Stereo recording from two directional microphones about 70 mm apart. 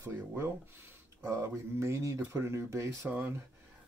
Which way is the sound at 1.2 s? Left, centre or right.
Right.